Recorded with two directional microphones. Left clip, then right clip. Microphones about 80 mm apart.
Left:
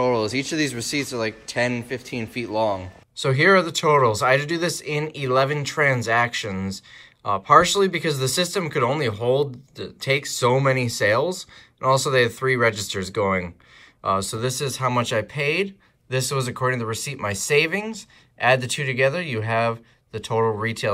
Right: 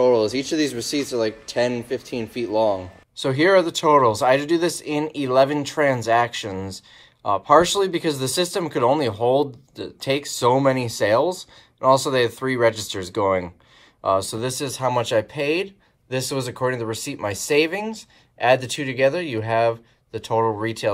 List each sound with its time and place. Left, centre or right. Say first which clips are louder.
0.0 s speech: right 4 dB; right